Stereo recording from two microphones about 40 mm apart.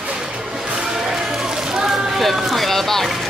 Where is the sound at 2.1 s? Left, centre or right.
Centre.